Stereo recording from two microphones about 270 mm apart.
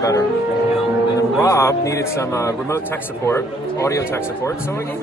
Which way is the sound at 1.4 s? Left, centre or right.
Centre.